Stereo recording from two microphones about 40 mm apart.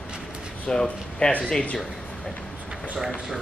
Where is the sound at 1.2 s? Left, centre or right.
Left.